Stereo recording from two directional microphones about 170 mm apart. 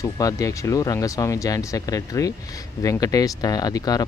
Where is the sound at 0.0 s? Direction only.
20° left (ahead or behind).